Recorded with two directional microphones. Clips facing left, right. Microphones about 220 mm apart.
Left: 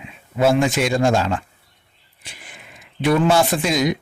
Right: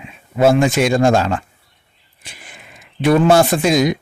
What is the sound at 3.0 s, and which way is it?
Speech, 45° right (ahead or behind).